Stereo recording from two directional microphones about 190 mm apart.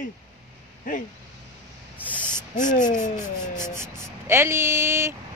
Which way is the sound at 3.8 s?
15° right (ahead or behind).